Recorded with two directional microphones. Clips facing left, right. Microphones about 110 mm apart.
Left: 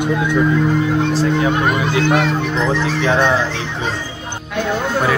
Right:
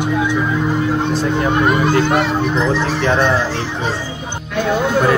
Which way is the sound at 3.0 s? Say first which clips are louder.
Left 1 dB; 5° right (ahead or behind).